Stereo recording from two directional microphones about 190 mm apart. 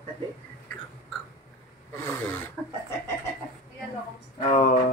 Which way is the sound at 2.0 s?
10° left (ahead or behind).